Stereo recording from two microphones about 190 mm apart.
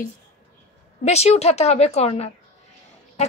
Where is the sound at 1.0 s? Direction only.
35° left (ahead or behind).